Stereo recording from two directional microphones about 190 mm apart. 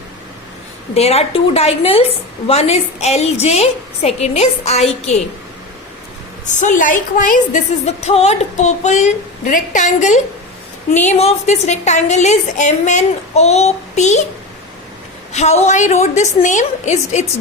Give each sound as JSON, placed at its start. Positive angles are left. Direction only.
{"t": 0.9, "sound": "a woman's voice", "side_deg": 35}
{"t": 6.4, "sound": "a woman's voice", "side_deg": 40}
{"t": 15.3, "sound": "a woman's voice", "side_deg": 35}